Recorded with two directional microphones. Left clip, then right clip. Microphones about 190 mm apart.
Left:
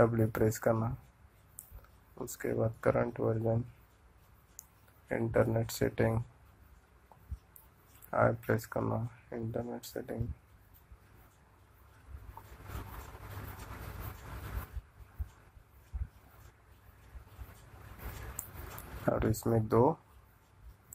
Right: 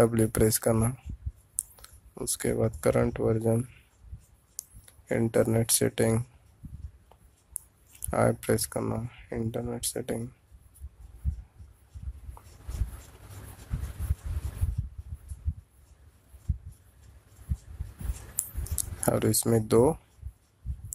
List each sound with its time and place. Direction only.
0.0 s speech: 45° right (ahead or behind)
2.1 s speech: 40° right (ahead or behind)
4.6 s a sound: 90° right
5.0 s speech: 40° right (ahead or behind)
8.1 s speech: 40° right (ahead or behind)
19.0 s speech: 45° right (ahead or behind)